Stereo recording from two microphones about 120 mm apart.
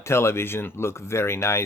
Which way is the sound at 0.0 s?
20° left (ahead or behind).